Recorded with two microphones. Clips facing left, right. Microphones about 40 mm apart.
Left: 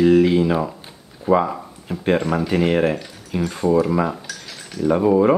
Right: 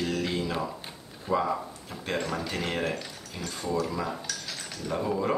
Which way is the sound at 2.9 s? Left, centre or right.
Centre.